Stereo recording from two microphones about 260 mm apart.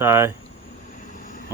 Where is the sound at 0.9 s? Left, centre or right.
Left.